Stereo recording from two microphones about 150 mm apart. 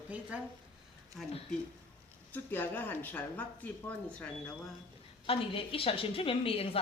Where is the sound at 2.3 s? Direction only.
15° left (ahead or behind).